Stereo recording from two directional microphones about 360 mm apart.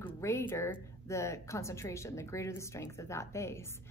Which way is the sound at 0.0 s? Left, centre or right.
Centre.